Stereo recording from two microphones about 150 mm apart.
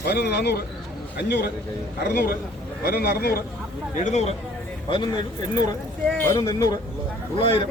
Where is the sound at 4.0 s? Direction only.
50° left (ahead or behind).